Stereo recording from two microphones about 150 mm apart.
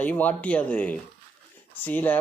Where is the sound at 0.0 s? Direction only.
10° left (ahead or behind).